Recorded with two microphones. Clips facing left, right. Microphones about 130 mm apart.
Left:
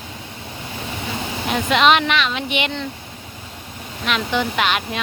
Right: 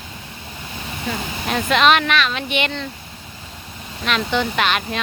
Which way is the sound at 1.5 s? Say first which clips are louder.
Even; 15° left (ahead or behind).